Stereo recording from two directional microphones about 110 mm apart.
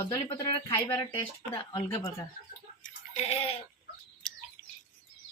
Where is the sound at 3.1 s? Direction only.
75° left (ahead or behind).